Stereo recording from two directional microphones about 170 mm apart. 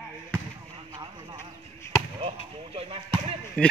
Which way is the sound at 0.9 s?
25° right (ahead or behind).